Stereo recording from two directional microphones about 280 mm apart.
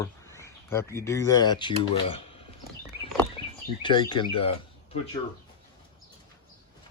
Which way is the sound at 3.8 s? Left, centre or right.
Centre.